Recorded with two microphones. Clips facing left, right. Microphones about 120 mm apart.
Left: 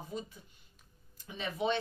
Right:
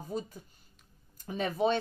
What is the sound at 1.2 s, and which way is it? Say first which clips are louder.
Speech: right 5 dB; 45° right (ahead or behind).